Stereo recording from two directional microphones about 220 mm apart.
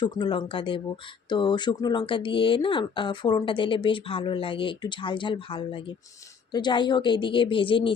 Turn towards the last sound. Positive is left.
turn(degrees=25)  # may be behind; listen again after turning